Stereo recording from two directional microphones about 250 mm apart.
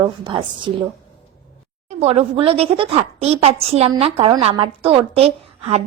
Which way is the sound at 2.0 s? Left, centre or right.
Right.